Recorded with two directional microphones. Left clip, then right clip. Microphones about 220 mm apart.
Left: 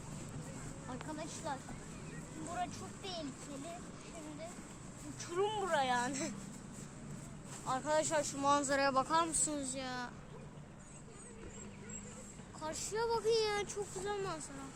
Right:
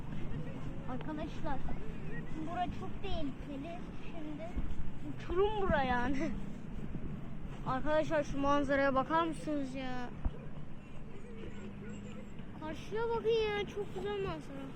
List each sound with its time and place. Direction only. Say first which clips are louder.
1.5 s speech: right 2 dB; 20° left (ahead or behind)
5.3 s speech: right 3 dB; 20° left (ahead or behind)
7.7 s speech: right 2 dB; 30° left (ahead or behind)
9.5 s a woman's voice: right 2 dB; 60° left (ahead or behind)
12.6 s speech: even; 25° left (ahead or behind)
14.1 s speech: right 1 dB; 35° left (ahead or behind)